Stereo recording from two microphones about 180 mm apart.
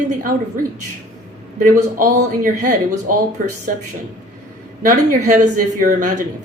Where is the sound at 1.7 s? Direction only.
45° right (ahead or behind).